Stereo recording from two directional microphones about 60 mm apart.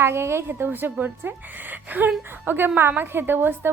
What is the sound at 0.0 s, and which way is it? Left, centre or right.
A woman's voice, right.